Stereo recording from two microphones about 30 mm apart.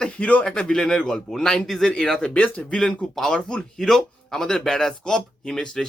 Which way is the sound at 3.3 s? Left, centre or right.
Left.